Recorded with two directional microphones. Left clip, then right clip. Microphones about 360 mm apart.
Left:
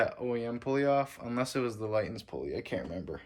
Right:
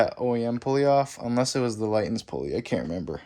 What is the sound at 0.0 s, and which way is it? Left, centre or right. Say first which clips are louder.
Speech: right 7 dB; centre.